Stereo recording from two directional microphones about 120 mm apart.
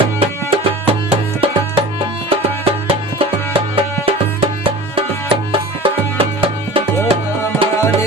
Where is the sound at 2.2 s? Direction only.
50° right (ahead or behind).